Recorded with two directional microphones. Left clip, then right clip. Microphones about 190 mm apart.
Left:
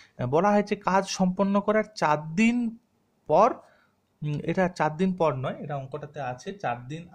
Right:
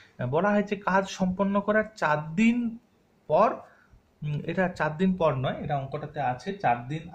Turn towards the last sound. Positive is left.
turn(degrees=50)  # may be behind; listen again after turning